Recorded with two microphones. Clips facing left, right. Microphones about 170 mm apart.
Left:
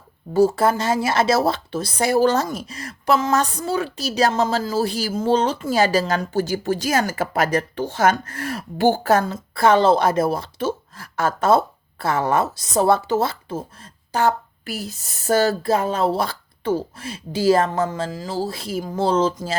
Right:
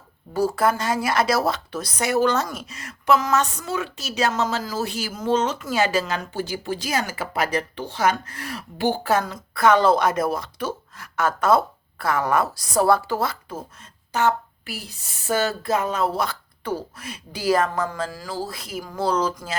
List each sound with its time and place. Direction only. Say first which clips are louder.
0.3 s speech: left 4 dB; 25° left (ahead or behind); by 9.2 s 45° left (ahead or behind)
9.2 s speech: left 2 dB; 30° left (ahead or behind)